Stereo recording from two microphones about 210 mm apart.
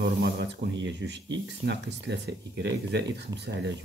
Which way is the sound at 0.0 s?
55° right (ahead or behind).